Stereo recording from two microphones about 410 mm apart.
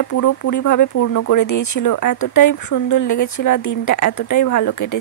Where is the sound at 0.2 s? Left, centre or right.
Left.